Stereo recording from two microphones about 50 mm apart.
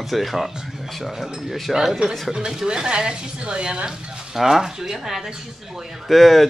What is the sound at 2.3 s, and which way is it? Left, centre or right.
Speech, centre.